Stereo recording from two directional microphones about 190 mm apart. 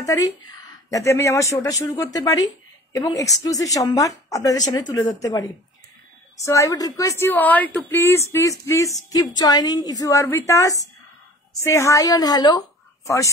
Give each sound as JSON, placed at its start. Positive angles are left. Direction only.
{"t": 0.0, "sound": "a woman's voice", "side_deg": 20}